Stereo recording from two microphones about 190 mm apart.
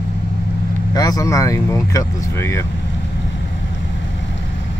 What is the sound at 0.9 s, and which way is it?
Speech, 20° left (ahead or behind).